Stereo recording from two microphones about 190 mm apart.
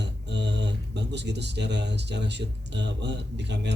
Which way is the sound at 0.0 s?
65° right (ahead or behind).